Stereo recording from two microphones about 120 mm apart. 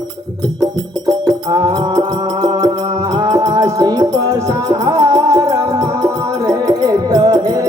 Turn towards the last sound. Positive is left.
turn(degrees=-30)  # may be behind; listen again after turning